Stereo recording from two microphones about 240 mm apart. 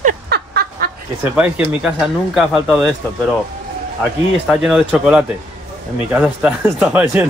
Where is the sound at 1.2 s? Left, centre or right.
Centre.